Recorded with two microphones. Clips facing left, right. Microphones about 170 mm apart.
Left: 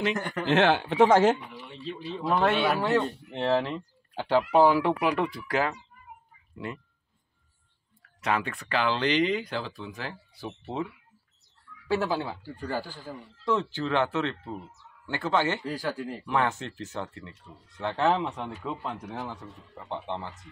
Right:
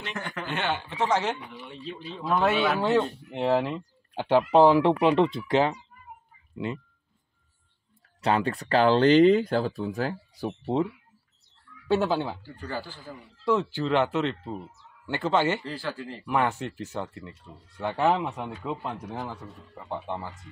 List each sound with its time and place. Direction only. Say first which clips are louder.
0.5 s speech: left 9 dB; 90° left; by 1.4 s 50° left (ahead or behind)
1.4 s speech: even; centre (ahead or behind)
2.8 s speech: right 2 dB; 15° right (ahead or behind)
6.5 s a man's voice: right 5 dB; 15° right (ahead or behind)
8.2 s speech: right 4 dB; 30° right (ahead or behind)
11.9 s speech: right 3 dB; 20° right (ahead or behind)
12.4 s speech: left 2 dB; 10° left (ahead or behind)
13.4 s a man's voice: right 3 dB; 15° right (ahead or behind)
15.6 s speech: left 2 dB; 10° left (ahead or behind)
16.3 s a man's voice: right 2 dB; 15° right (ahead or behind)